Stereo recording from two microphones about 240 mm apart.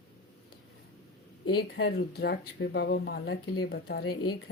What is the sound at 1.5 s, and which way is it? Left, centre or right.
Speech, left.